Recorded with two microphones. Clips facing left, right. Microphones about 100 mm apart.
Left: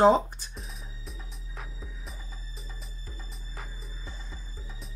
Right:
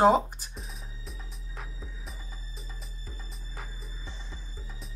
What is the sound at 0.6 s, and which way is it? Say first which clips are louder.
Music: even; centre (ahead or behind).